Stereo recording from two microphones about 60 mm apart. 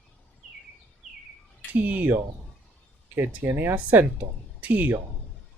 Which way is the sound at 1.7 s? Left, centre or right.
Right.